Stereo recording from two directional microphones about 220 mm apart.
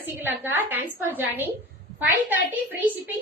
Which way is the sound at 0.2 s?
10° right (ahead or behind).